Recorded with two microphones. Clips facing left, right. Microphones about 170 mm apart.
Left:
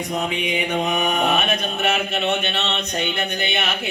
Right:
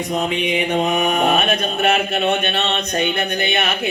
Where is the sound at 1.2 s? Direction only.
50° right (ahead or behind).